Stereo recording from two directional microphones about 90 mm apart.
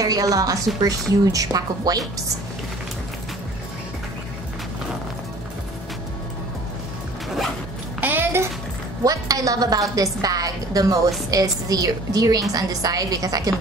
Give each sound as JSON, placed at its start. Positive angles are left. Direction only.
{"t": 0.0, "sound": "a woman's voice", "side_deg": -40}
{"t": 8.0, "sound": "a sound", "side_deg": -25}
{"t": 9.0, "sound": "a woman's voice", "side_deg": -40}